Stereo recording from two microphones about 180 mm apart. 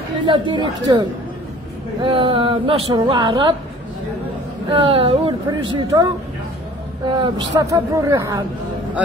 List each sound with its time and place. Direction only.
0.3 s a woman's voice: 25° right (ahead or behind)
4.6 s a woman's voice: 30° right (ahead or behind)
7.2 s a woman's voice: 25° right (ahead or behind)